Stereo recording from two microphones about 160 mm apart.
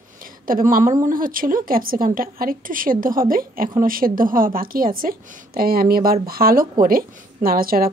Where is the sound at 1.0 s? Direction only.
60° right (ahead or behind).